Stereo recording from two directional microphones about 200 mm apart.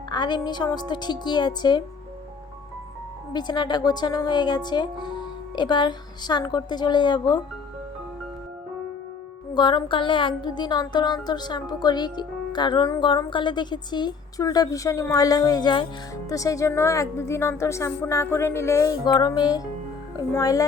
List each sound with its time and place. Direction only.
0.1 s speech: 20° left (ahead or behind)
3.3 s speech: 20° left (ahead or behind)
9.6 s speech: 20° left (ahead or behind)